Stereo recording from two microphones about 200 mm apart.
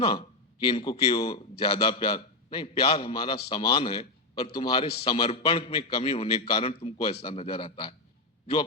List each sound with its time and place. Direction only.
0.0 s a man's voice: 30° left (ahead or behind)